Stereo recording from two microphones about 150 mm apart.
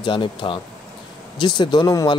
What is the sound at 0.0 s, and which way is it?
Speech, 35° left (ahead or behind).